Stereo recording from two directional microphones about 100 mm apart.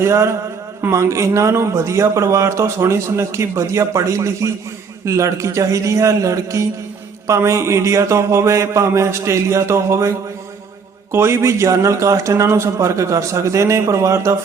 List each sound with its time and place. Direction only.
0.0 s a man's voice: 30° right (ahead or behind)